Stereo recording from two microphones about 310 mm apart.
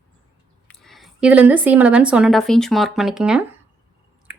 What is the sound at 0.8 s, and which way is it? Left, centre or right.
A woman's voice, centre.